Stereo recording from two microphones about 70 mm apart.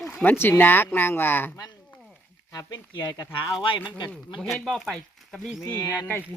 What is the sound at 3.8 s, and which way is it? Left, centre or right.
Speech, left.